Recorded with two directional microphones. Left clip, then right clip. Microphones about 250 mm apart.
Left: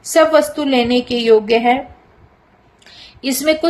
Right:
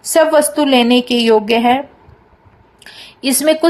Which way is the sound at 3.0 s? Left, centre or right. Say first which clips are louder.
Right 3 dB; centre.